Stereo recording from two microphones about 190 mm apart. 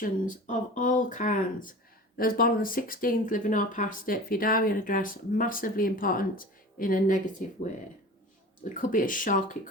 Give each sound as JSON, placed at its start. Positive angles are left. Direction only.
{"t": 0.0, "sound": "speech", "side_deg": 45}
{"t": 8.7, "sound": "speech", "side_deg": 45}